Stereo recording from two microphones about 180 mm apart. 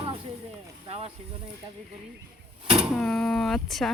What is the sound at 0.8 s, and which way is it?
Speech, 35° right (ahead or behind).